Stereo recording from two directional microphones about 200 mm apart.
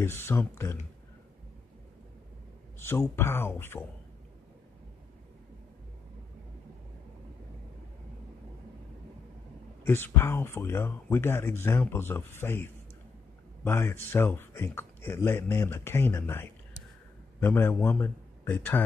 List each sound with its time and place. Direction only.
0.0 s speech: 10° left (ahead or behind)
2.8 s speech: 10° left (ahead or behind)
9.8 s speech: 10° left (ahead or behind)
13.7 s a man's voice: 10° left (ahead or behind)